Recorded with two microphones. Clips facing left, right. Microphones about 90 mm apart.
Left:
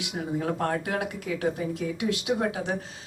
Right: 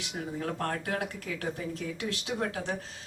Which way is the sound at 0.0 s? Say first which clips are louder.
Left 5 dB; 15° left (ahead or behind).